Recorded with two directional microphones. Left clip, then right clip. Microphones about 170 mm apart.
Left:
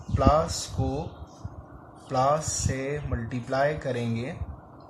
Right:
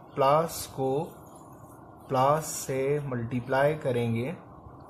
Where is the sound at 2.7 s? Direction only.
55° right (ahead or behind).